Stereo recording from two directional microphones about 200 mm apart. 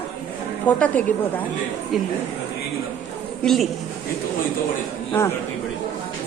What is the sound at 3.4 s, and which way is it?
Speech, centre (ahead or behind).